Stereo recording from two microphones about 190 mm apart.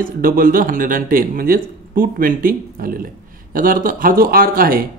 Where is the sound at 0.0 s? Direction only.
50° right (ahead or behind).